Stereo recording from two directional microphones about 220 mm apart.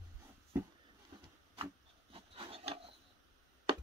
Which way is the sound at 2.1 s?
25° right (ahead or behind).